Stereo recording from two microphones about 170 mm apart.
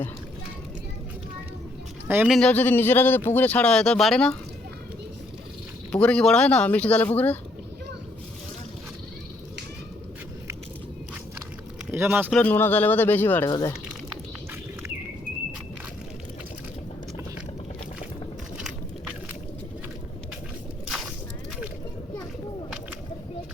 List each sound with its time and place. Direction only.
2.0 s speech: 10° right (ahead or behind)
2.3 s speech: 5° left (ahead or behind)
5.9 s speech: 5° left (ahead or behind)
11.9 s speech: 10° right (ahead or behind)
12.3 s speech: 10° left (ahead or behind)
13.5 s speech: 20° left (ahead or behind)